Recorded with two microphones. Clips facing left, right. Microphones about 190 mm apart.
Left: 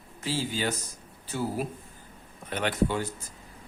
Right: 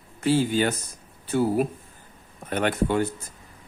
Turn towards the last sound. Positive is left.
turn(degrees=-55)  # may be behind; listen again after turning